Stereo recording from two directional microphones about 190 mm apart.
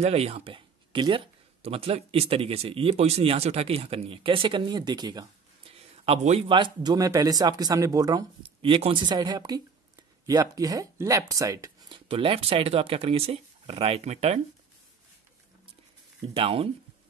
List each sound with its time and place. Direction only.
0.0 s speech: 35° right (ahead or behind)
5.8 s speech: 35° right (ahead or behind); by 12.0 s 15° right (ahead or behind)
12.1 s speech: 30° right (ahead or behind)
16.2 s speech: 30° right (ahead or behind)